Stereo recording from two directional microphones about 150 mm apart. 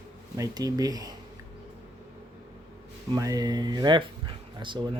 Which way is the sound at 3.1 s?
25° right (ahead or behind).